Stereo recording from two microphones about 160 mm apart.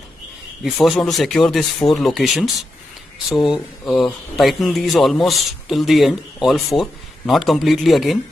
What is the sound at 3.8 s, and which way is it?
Speech, centre (ahead or behind).